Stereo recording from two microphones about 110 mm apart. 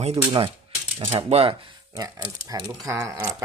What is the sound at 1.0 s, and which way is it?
Speech, 60° right (ahead or behind).